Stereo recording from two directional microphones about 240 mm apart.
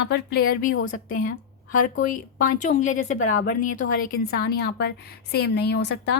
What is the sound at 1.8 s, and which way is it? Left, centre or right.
A woman's voice, left.